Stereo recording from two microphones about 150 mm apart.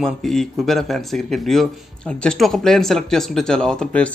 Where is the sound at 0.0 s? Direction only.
Centre (ahead or behind).